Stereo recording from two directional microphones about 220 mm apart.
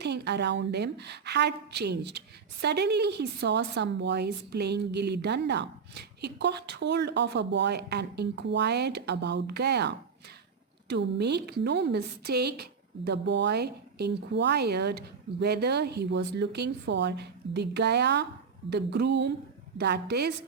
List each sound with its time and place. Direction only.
0.0 s a woman's voice: 50° right (ahead or behind)